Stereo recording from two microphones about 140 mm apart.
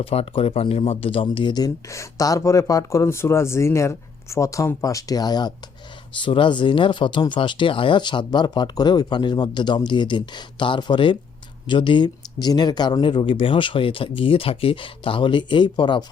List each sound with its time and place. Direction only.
0.0 s speech: 45° left (ahead or behind)